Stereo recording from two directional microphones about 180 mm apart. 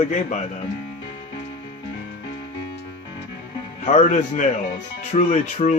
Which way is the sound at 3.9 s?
40° left (ahead or behind).